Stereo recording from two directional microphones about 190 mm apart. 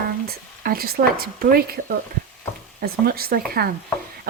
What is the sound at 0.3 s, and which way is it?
Speech, 50° right (ahead or behind).